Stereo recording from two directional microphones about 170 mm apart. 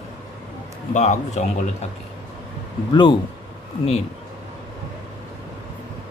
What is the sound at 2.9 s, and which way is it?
Speech, 25° left (ahead or behind).